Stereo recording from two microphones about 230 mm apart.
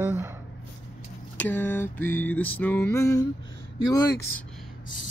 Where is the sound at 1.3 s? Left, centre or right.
Centre.